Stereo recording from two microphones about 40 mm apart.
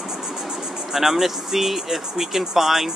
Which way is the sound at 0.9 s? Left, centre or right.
Centre.